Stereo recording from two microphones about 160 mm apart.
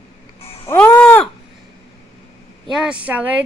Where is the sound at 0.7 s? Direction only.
10° left (ahead or behind).